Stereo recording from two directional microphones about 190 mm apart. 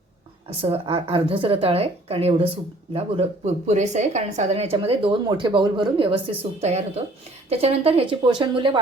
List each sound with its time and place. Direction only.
0.6 s a woman's voice: 30° right (ahead or behind)